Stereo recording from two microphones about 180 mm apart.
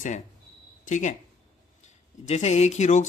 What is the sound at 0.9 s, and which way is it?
Speech, 45° left (ahead or behind).